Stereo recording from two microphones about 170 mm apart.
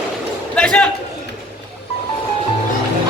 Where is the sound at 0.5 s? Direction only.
5° left (ahead or behind).